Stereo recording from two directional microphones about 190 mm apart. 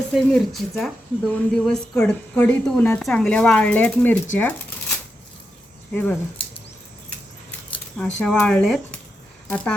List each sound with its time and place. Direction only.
0.1 s a woman's voice: centre (ahead or behind)
4.4 s a sound: 10° left (ahead or behind)
5.9 s speech: 10° left (ahead or behind)
7.9 s a woman's voice: 5° left (ahead or behind)